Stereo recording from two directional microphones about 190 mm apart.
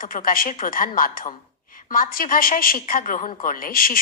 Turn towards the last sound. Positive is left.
turn(degrees=50)  # may be behind; listen again after turning